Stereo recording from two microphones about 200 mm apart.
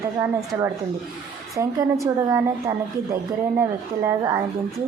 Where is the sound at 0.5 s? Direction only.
10° right (ahead or behind).